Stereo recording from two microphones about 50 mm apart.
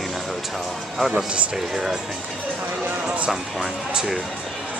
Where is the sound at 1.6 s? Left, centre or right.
Centre.